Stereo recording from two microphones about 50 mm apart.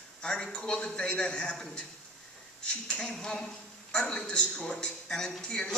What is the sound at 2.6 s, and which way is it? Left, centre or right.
A man's voice, centre.